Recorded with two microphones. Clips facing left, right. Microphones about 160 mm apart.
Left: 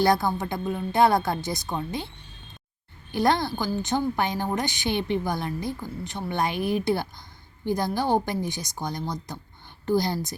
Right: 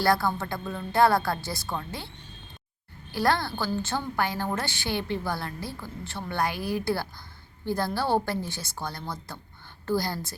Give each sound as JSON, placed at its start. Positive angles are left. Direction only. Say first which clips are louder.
{"t": 0.0, "sound": "a woman's voice", "louder": "left 2 dB", "side_deg": 20}
{"t": 3.1, "sound": "a woman's voice", "louder": "left 3 dB", "side_deg": 20}